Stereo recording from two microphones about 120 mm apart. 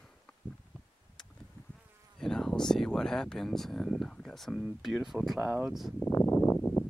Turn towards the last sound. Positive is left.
turn(degrees=20)  # may be behind; listen again after turning